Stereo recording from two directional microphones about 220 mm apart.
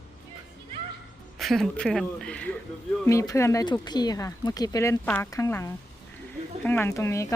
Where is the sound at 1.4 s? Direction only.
Centre (ahead or behind).